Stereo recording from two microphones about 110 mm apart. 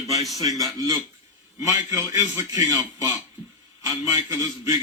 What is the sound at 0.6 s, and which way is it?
A man's voice, 30° right (ahead or behind).